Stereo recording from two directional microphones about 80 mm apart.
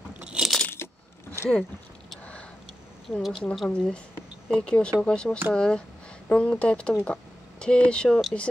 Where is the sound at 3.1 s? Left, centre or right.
Centre.